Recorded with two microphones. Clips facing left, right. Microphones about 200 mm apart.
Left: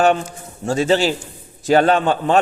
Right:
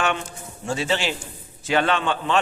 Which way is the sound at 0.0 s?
40° left (ahead or behind).